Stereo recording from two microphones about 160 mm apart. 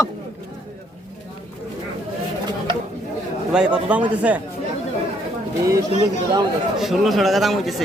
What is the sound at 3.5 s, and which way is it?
Speech, 5° right (ahead or behind).